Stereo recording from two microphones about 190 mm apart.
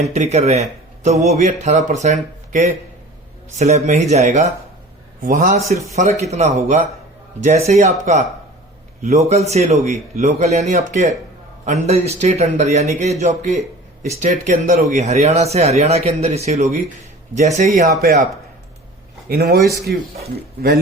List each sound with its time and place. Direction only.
0.0 s a man's voice: 35° right (ahead or behind)
18.0 s a man's voice: 50° right (ahead or behind)
19.3 s speech: 55° right (ahead or behind)